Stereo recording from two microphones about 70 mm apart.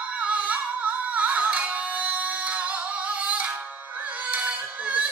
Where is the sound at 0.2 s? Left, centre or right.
Centre.